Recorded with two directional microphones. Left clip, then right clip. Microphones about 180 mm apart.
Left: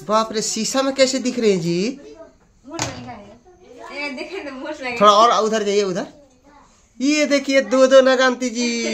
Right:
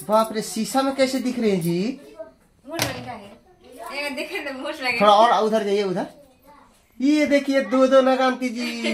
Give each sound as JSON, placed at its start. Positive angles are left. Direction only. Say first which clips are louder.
{"t": 0.0, "sound": "speech", "louder": "left 1 dB", "side_deg": 25}
{"t": 5.0, "sound": "speech", "louder": "left 3 dB", "side_deg": 25}